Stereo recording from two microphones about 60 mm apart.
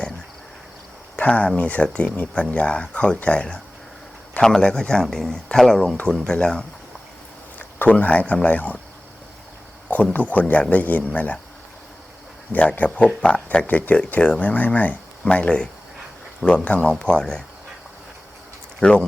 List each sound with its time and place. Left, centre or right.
1.1 s speech: left
7.6 s speech: left
9.9 s speech: left
12.5 s speech: left; by 16.6 s centre
16.6 s speech: centre
18.8 s speech: centre